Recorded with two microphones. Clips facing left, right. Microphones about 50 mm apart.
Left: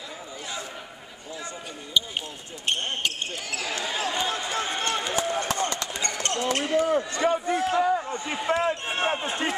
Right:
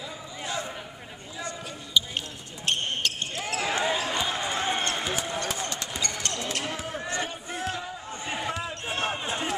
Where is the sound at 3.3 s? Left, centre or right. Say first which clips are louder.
Right 3 dB; right.